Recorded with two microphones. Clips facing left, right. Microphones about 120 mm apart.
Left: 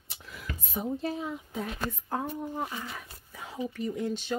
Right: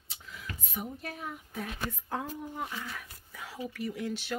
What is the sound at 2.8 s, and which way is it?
Speech, 20° left (ahead or behind).